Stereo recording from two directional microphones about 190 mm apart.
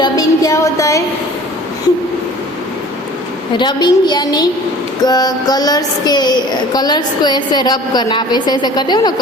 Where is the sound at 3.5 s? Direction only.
25° left (ahead or behind).